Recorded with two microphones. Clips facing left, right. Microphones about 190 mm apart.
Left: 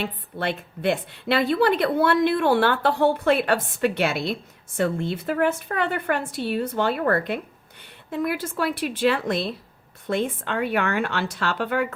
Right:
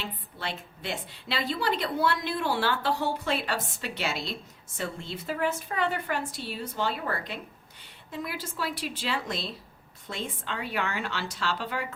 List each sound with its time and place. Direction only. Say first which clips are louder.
0.0 s a woman's voice: left 9 dB; 60° left (ahead or behind)